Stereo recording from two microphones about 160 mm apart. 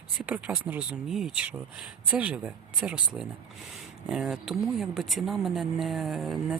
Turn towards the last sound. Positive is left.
turn(degrees=0)  # may be behind; listen again after turning